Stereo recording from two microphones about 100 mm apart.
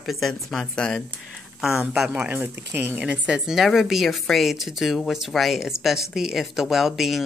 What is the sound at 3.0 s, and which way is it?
A woman's voice, 10° right (ahead or behind).